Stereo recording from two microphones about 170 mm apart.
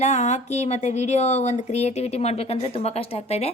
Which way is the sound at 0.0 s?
45° left (ahead or behind).